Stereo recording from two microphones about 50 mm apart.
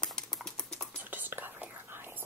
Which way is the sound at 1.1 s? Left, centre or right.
Right.